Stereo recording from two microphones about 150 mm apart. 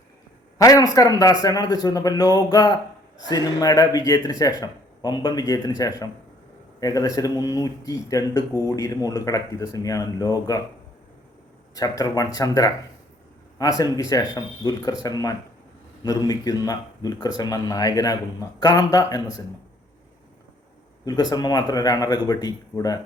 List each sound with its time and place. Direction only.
0.6 s speech: 25° left (ahead or behind)
11.7 s speech: 25° left (ahead or behind)
21.0 s speech: 25° left (ahead or behind)